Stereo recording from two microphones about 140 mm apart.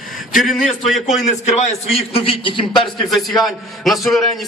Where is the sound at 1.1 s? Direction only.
55° left (ahead or behind); by 2.6 s 35° left (ahead or behind).